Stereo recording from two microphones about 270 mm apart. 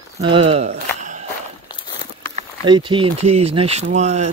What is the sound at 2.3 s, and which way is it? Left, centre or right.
Speech, centre.